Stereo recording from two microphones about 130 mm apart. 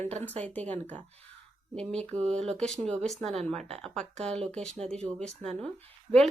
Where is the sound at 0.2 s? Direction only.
10° left (ahead or behind).